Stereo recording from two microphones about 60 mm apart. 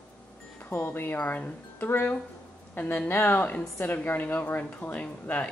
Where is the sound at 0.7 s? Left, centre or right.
Left.